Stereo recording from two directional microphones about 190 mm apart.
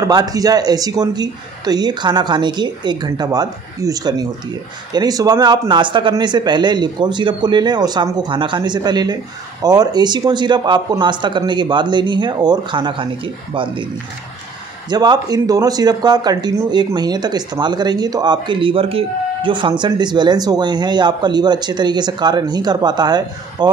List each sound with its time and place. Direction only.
0.0 s speech: 20° right (ahead or behind)
14.9 s speech: 20° right (ahead or behind)